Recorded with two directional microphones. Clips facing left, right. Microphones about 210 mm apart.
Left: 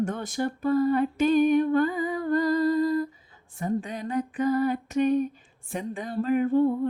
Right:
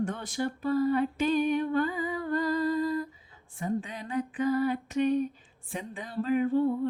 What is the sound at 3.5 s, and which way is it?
Speech, 40° left (ahead or behind).